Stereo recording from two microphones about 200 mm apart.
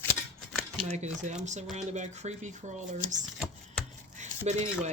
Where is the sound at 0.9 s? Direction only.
35° right (ahead or behind).